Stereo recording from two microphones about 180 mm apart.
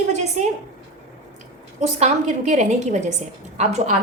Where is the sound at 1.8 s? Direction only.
40° right (ahead or behind).